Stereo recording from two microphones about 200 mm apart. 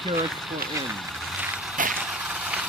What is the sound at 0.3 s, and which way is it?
Speech, centre (ahead or behind).